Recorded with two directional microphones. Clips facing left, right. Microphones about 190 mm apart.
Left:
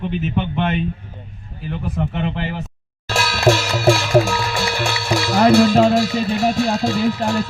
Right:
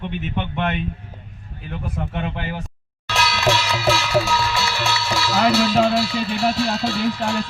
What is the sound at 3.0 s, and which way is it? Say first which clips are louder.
Music: left 4 dB; 45° left (ahead or behind).